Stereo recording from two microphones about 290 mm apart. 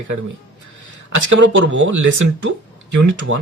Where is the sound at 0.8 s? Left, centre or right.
Right.